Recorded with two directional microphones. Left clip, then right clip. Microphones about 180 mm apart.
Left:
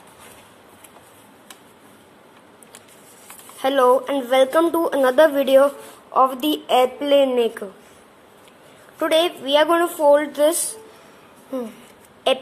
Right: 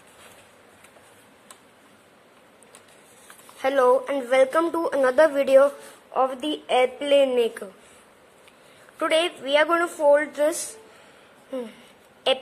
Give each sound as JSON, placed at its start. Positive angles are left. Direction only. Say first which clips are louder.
{"t": 3.6, "sound": "a woman's voice", "louder": "left 3 dB", "side_deg": -20}
{"t": 8.9, "sound": "a woman's voice", "louder": "left 4 dB", "side_deg": -15}